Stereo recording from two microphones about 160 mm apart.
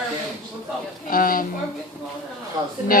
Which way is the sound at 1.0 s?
60° left (ahead or behind).